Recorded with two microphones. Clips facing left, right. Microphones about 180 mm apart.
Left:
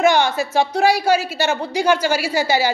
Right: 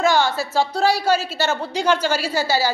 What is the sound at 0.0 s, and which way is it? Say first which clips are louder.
A woman's voice: left 2 dB; 20° left (ahead or behind).